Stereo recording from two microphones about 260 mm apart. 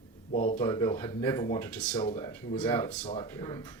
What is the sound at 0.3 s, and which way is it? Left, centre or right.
Speech, left.